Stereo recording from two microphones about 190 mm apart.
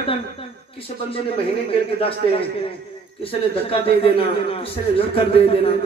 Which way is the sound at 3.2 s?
30° left (ahead or behind).